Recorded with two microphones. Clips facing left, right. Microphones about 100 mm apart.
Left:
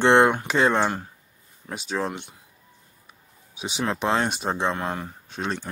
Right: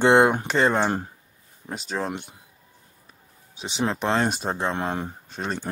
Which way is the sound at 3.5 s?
10° left (ahead or behind).